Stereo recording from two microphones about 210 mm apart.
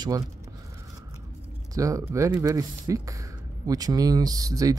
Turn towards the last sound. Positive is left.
turn(degrees=-15)  # may be behind; listen again after turning